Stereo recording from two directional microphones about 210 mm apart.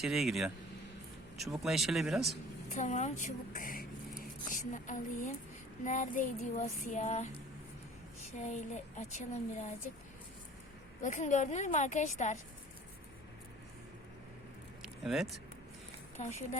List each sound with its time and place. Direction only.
0.0 s speech: centre (ahead or behind)
2.7 s speech: 35° left (ahead or behind)
5.8 s female singing: 35° left (ahead or behind)
8.4 s female singing: 35° left (ahead or behind)
11.0 s female singing: 35° left (ahead or behind)
14.8 s vehicle: centre (ahead or behind)
16.1 s female singing: 35° left (ahead or behind)